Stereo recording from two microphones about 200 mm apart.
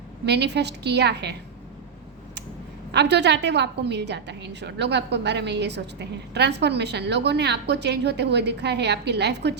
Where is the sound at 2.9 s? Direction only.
55° right (ahead or behind).